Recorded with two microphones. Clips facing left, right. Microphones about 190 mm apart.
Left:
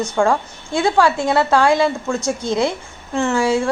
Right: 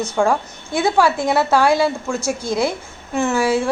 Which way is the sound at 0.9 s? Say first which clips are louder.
Left 1 dB; 15° right (ahead or behind).